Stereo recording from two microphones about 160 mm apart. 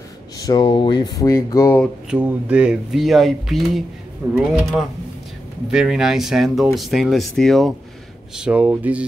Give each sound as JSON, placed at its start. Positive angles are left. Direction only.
{"t": 0.4, "sound": "speech", "side_deg": 25}
{"t": 2.0, "sound": "speech", "side_deg": -10}
{"t": 5.7, "sound": "speech", "side_deg": -5}